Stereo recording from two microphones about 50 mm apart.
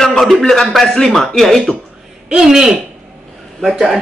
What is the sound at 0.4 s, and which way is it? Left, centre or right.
A man's voice, centre.